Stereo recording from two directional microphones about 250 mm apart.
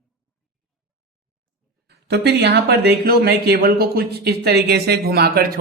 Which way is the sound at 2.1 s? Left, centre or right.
Right.